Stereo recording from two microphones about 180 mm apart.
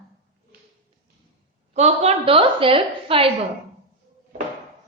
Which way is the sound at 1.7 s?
35° right (ahead or behind).